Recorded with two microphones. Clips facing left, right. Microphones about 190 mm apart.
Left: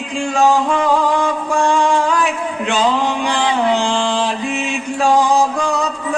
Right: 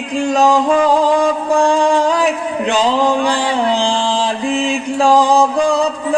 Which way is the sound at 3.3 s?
35° right (ahead or behind).